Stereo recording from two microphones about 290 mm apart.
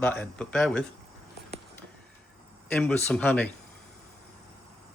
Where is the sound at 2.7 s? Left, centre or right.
Centre.